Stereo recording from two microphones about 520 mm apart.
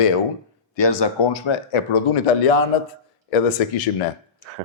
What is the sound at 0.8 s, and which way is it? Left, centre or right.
Speech, left.